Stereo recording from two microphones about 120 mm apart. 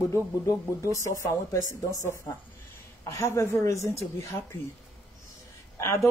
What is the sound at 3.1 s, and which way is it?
Speech, 25° left (ahead or behind).